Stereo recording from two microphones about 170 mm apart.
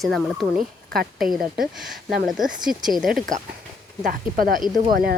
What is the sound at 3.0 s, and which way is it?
A woman's voice, 55° right (ahead or behind).